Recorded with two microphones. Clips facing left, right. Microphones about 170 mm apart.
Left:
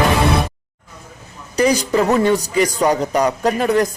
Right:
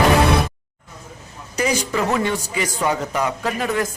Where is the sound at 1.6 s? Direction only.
35° left (ahead or behind).